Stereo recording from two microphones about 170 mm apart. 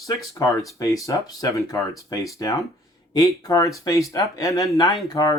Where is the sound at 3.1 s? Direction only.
20° left (ahead or behind).